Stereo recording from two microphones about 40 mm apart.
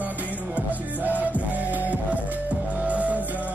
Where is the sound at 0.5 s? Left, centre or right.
Right.